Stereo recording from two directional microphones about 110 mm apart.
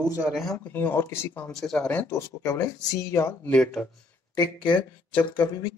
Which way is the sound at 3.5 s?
10° left (ahead or behind).